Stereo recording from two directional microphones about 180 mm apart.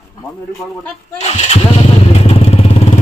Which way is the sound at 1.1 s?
35° left (ahead or behind).